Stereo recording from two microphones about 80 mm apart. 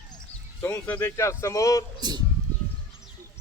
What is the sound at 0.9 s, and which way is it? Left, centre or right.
Speech, left.